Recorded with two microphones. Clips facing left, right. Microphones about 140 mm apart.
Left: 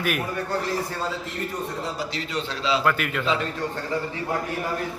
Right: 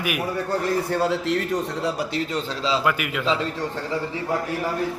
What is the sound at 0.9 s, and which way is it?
Speech, 80° right.